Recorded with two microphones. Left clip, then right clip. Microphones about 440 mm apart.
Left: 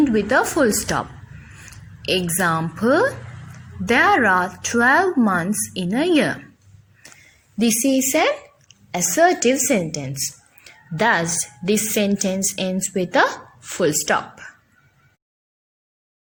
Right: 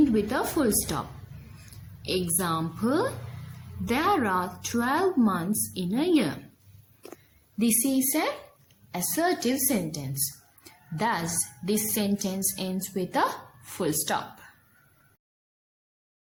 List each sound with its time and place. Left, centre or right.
0.1 s a woman's voice: left
7.9 s a woman's voice: left